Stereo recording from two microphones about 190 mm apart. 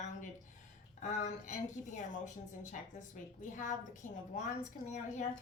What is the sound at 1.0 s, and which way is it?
Speech, 40° left (ahead or behind).